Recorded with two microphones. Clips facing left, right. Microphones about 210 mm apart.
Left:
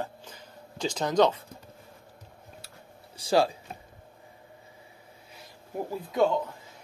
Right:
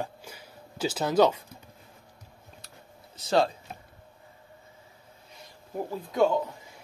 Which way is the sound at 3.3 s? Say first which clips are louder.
Left 1 dB; 10° left (ahead or behind).